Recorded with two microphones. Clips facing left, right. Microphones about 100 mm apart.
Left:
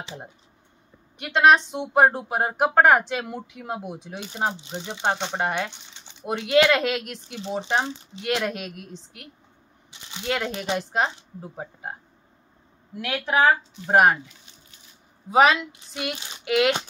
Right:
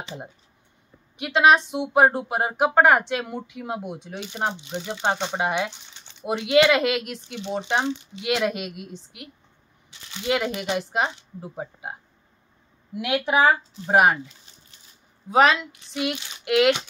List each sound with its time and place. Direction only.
1.1 s speech: 5° right (ahead or behind)
4.6 s speech: 25° left (ahead or behind)
5.0 s speech: 5° right (ahead or behind)
15.2 s speech: 5° left (ahead or behind)